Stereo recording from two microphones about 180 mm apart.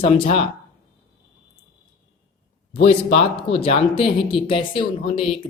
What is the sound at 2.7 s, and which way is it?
Speech, 35° left (ahead or behind).